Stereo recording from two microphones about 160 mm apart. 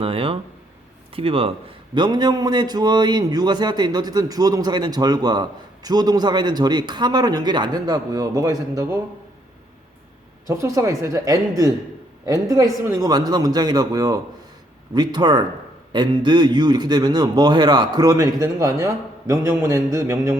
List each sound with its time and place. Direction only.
0.0 s speech: 35° right (ahead or behind)
2.0 s a man's voice: 25° right (ahead or behind)
10.4 s a man's voice: 20° right (ahead or behind)